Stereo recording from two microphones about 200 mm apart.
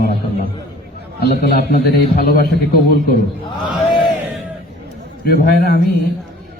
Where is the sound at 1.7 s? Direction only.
50° left (ahead or behind).